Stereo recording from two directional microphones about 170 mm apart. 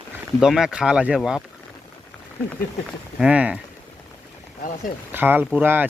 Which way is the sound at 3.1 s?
5° right (ahead or behind).